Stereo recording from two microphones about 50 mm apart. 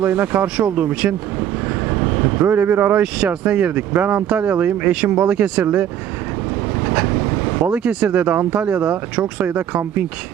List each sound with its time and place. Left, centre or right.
0.0 s speech: right
3.2 s speech: right
7.7 s speech: right
9.5 s speech: right